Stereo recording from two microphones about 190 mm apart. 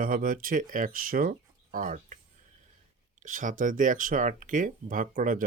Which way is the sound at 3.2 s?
45° right (ahead or behind).